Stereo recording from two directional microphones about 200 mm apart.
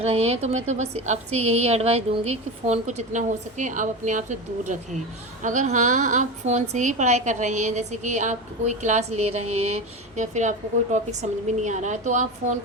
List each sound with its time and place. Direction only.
0.0 s a woman's voice: 30° right (ahead or behind)